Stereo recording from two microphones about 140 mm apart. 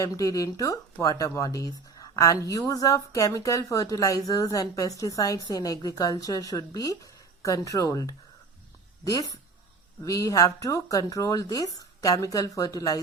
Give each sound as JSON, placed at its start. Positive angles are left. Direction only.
{"t": 0.0, "sound": "speech", "side_deg": 25}